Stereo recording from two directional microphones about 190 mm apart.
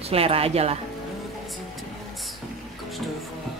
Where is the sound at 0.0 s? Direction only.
30° right (ahead or behind).